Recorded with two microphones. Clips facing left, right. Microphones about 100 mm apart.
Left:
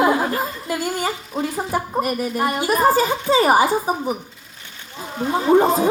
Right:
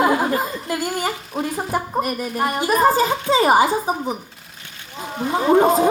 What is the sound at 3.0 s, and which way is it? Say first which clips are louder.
Speech: even; 25° right (ahead or behind).